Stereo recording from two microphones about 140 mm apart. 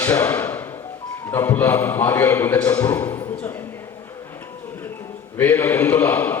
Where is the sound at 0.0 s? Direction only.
15° left (ahead or behind).